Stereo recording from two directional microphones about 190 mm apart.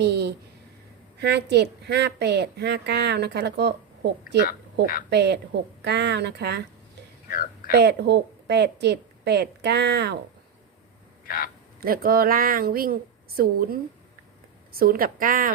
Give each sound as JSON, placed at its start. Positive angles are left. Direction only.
{"t": 0.0, "sound": "a woman's voice", "side_deg": -60}
{"t": 4.4, "sound": "speech", "side_deg": 50}
{"t": 5.1, "sound": "a woman's voice", "side_deg": -60}
{"t": 7.7, "sound": "a woman's voice", "side_deg": -60}
{"t": 11.3, "sound": "speech", "side_deg": 50}
{"t": 11.8, "sound": "speech", "side_deg": -50}